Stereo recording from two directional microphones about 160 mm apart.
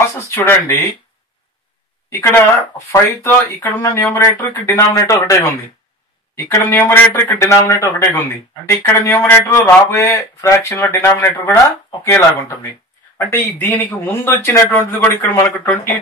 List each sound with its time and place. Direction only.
0.2 s speech: 15° left (ahead or behind)
2.0 s speech: 15° left (ahead or behind)
13.6 s speech: 10° left (ahead or behind)